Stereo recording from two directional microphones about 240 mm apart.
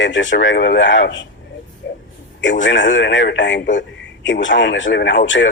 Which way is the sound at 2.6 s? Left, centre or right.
Left.